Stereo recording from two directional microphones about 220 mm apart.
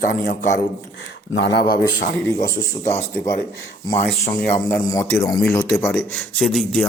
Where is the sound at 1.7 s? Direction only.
15° left (ahead or behind).